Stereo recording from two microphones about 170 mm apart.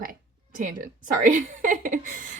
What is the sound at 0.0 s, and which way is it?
A woman's voice, 55° right (ahead or behind).